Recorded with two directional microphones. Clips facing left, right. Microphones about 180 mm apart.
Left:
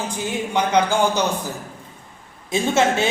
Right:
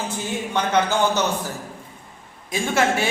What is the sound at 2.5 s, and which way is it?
Speech, 25° left (ahead or behind).